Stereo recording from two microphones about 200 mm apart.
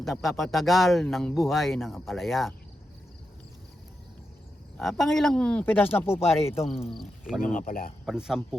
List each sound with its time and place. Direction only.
0.0 s speech: centre (ahead or behind)
4.8 s speech: centre (ahead or behind)
6.7 s speech: 30° left (ahead or behind)
7.0 s speech: centre (ahead or behind)
7.4 s speech: 40° left (ahead or behind)
8.0 s speech: 5° right (ahead or behind)